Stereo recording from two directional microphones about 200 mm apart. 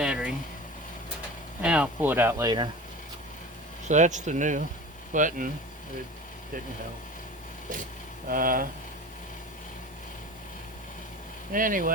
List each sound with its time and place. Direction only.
0.0 s vehicle: 5° right (ahead or behind)
1.6 s speech: 5° right (ahead or behind)
3.8 s speech: 35° right (ahead or behind)
8.3 s speech: 45° right (ahead or behind)
11.5 s speech: 45° right (ahead or behind)